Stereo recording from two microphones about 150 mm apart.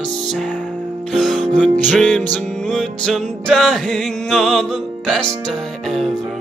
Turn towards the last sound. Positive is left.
turn(degrees=0)  # may be behind; listen again after turning